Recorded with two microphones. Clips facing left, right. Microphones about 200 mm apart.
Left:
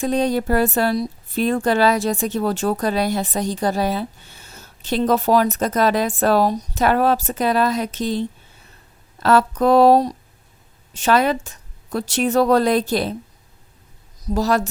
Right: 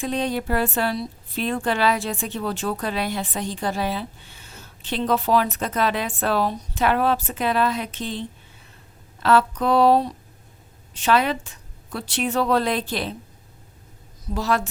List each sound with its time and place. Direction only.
0.0 s a woman's voice: 40° left (ahead or behind)
9.2 s a woman's voice: 45° left (ahead or behind)
14.3 s a woman's voice: 40° left (ahead or behind)